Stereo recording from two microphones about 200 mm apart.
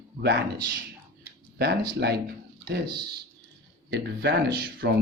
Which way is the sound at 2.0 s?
55° right (ahead or behind).